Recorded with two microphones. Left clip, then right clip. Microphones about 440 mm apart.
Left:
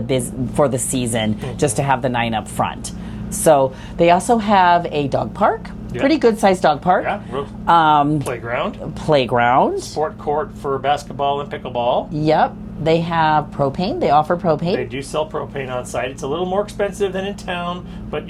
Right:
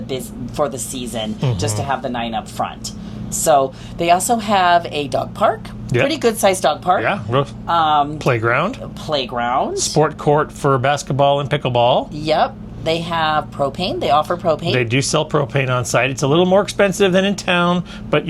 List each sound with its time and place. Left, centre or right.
0.1 s speech: centre
7.0 s speech: right
7.7 s speech: left
8.2 s speech: right
9.0 s speech: left
10.0 s speech: right
12.1 s speech: centre
14.8 s speech: right